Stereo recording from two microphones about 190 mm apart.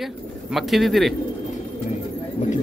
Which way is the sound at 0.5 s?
Centre (ahead or behind).